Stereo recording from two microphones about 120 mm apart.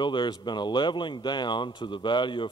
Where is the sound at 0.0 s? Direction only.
40° left (ahead or behind).